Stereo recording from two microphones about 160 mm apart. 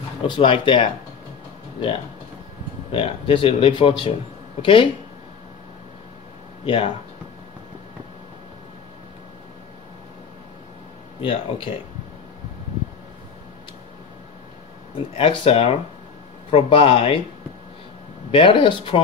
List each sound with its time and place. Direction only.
0.3 s speech: 30° left (ahead or behind)
2.9 s speech: 35° left (ahead or behind)
6.6 s speech: 35° left (ahead or behind)
11.2 s speech: 30° left (ahead or behind)
15.1 s speech: 35° left (ahead or behind)
18.3 s speech: 30° left (ahead or behind)